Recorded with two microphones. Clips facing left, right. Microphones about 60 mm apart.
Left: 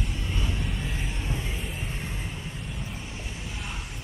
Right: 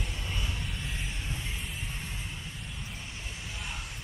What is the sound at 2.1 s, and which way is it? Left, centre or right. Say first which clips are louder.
Train: left 5 dB; left.